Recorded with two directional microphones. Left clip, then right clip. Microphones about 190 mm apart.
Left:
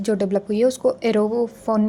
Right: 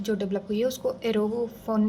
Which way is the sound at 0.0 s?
40° left (ahead or behind).